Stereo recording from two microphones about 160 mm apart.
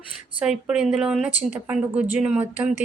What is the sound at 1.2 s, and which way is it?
Speech, 50° left (ahead or behind).